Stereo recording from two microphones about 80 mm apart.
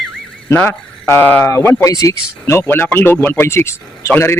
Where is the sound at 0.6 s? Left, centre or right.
Left.